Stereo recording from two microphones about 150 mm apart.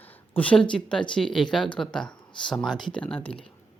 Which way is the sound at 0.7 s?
5° left (ahead or behind).